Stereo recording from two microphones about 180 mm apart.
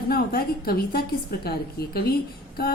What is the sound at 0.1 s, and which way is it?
A woman's voice, 55° left (ahead or behind).